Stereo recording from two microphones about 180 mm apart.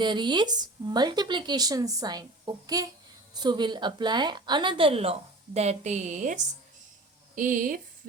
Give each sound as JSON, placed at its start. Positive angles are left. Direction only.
{"t": 0.0, "sound": "a woman's voice", "side_deg": -25}